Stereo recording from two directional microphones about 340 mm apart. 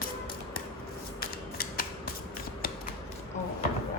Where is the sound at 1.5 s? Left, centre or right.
Left.